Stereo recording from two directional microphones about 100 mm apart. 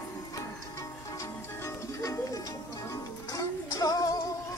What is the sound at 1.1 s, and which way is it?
Music, 30° left (ahead or behind).